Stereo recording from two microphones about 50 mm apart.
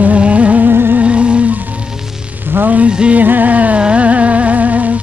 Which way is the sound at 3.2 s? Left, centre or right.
Right.